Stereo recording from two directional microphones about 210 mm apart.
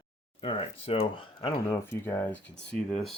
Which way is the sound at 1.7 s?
10° left (ahead or behind).